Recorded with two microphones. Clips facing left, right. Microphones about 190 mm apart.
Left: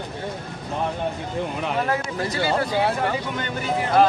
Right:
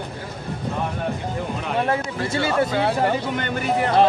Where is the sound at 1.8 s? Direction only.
25° right (ahead or behind).